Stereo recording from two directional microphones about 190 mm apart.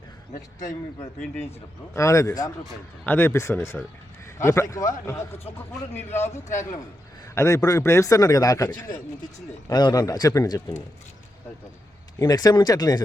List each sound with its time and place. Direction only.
1.9 s speech: 15° left (ahead or behind)
5.9 s speech: 10° left (ahead or behind)
6.1 s a man's voice: 35° left (ahead or behind)
7.3 s a man's voice: 15° left (ahead or behind)
12.2 s a man's voice: 20° left (ahead or behind)